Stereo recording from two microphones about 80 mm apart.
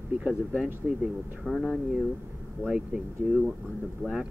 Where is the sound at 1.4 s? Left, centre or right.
Centre.